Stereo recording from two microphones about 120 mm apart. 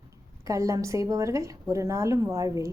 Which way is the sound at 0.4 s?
25° right (ahead or behind).